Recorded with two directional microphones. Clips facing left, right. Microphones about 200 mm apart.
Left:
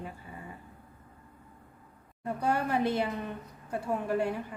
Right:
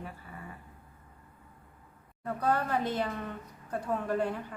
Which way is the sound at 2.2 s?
10° left (ahead or behind).